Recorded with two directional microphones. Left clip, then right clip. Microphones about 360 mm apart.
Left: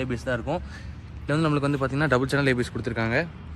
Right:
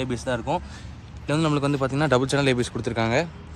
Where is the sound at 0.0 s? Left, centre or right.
Centre.